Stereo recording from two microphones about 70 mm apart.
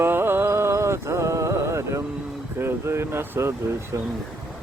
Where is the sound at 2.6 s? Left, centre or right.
Right.